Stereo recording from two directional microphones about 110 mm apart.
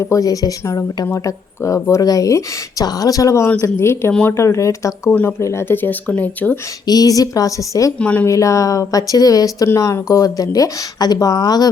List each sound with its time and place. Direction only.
0.0 s speech: 30° left (ahead or behind); by 6.6 s 15° left (ahead or behind)
6.8 s speech: 35° left (ahead or behind)
7.9 s speech: 10° left (ahead or behind)
8.3 s speech: 30° left (ahead or behind)